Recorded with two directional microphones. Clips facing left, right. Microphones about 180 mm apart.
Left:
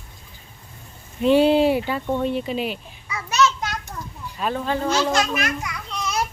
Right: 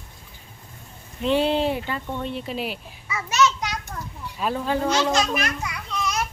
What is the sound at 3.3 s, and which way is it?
Children playing, 20° right (ahead or behind).